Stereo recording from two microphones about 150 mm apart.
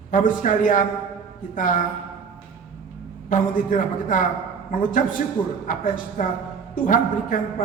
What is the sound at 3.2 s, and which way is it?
A man's voice, 60° left (ahead or behind).